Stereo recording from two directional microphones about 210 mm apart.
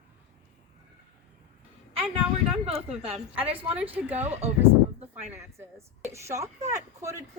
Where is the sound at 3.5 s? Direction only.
5° right (ahead or behind).